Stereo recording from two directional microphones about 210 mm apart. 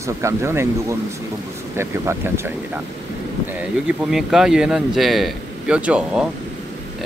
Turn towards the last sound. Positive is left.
turn(degrees=-5)  # may be behind; listen again after turning